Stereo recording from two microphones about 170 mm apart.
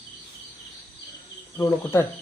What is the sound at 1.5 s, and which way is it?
Speech, 15° left (ahead or behind).